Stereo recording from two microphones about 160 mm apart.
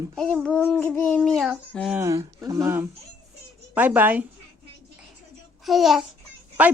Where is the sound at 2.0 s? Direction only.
20° right (ahead or behind).